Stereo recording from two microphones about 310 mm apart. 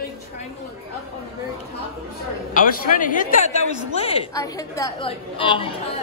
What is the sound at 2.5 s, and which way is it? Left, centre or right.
A man's voice, left.